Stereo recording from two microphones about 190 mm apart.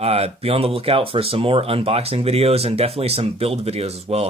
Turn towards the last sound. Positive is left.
turn(degrees=-35)  # may be behind; listen again after turning